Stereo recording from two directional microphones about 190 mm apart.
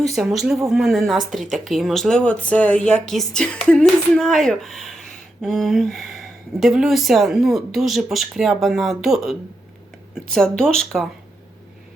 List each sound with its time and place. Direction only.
0.0 s speech: centre (ahead or behind)